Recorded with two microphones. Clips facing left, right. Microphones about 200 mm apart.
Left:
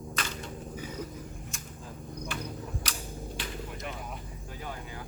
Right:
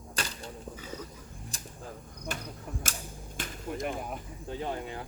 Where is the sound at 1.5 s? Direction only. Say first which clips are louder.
Left 1 dB; 35° right (ahead or behind).